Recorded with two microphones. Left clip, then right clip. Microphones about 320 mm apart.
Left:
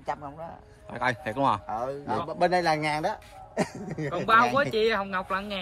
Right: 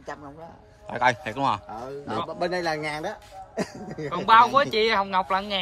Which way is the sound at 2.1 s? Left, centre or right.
Left.